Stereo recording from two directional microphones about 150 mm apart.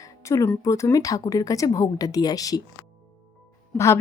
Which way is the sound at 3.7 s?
20° left (ahead or behind).